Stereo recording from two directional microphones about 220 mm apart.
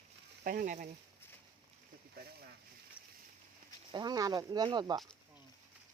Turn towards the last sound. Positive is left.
turn(degrees=-20)  # may be behind; listen again after turning